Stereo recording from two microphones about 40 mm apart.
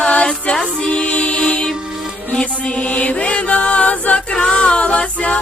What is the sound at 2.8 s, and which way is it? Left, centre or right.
Mantra, left.